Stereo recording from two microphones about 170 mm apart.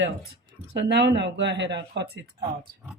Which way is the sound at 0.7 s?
80° right.